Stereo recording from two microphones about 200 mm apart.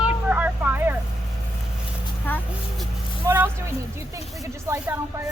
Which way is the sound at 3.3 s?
10° right (ahead or behind).